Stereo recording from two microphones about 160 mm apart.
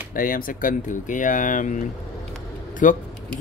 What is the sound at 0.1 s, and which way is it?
Speech, 60° left (ahead or behind).